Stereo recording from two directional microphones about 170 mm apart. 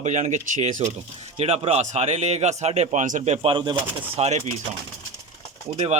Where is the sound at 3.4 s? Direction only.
30° right (ahead or behind).